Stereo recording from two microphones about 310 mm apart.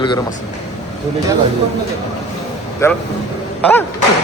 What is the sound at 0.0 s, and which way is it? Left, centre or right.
Speech, centre.